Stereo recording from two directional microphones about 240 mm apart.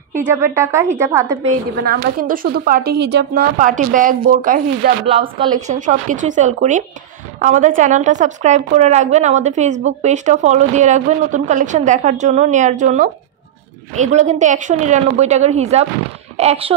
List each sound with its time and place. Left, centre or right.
0.1 s a woman's voice: centre
1.9 s a woman's voice: right
5.4 s a woman's voice: centre
5.8 s a woman's voice: right